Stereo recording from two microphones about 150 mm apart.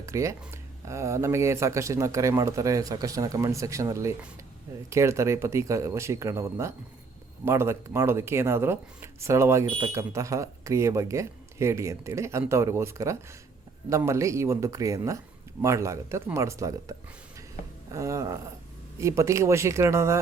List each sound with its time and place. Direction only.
0.0 s speech: 20° right (ahead or behind)
17.9 s speech: 20° right (ahead or behind)